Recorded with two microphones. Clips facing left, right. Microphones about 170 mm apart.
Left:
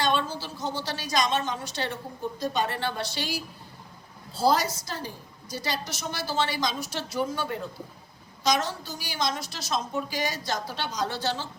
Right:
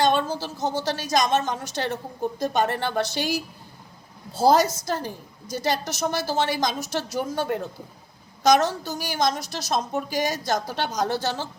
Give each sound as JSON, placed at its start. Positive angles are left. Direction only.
{"t": 0.0, "sound": "a woman's voice", "side_deg": -45}
{"t": 8.4, "sound": "a woman's voice", "side_deg": -45}